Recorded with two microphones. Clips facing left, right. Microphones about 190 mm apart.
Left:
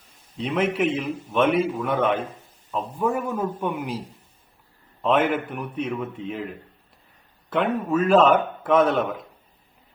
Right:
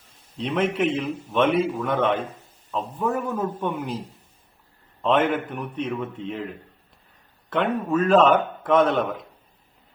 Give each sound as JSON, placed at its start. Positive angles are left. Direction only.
{"t": 0.3, "sound": "a man's voice", "side_deg": 5}
{"t": 5.0, "sound": "a man's voice", "side_deg": 10}
{"t": 7.5, "sound": "a man's voice", "side_deg": 5}